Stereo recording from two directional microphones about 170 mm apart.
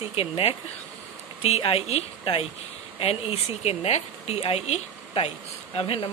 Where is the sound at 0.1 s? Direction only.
35° left (ahead or behind).